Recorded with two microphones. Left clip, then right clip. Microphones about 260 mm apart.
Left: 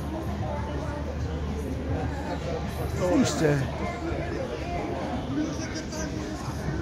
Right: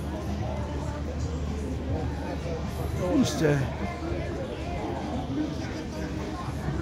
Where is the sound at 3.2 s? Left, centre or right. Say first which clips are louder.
Right 2 dB; centre.